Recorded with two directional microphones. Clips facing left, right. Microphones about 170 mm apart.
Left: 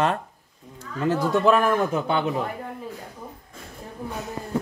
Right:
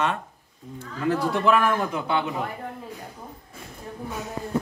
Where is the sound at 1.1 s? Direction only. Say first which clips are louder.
Left 2 dB; 30° left (ahead or behind).